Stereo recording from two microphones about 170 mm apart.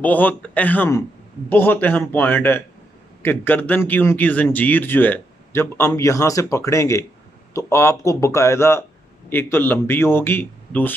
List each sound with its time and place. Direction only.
0.0 s speech: 10° left (ahead or behind)